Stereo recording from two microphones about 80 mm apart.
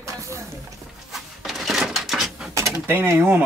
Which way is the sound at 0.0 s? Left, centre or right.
Right.